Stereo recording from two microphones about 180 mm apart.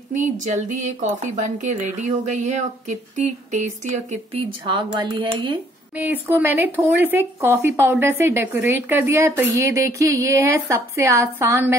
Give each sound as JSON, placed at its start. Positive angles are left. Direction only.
{"t": 0.1, "sound": "speech", "side_deg": -45}
{"t": 4.6, "sound": "speech", "side_deg": -25}
{"t": 5.9, "sound": "speech", "side_deg": -10}